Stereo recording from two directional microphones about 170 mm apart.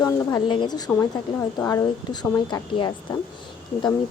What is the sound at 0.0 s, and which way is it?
A woman's voice, 20° left (ahead or behind).